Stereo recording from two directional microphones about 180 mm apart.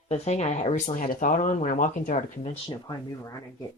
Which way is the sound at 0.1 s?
40° left (ahead or behind).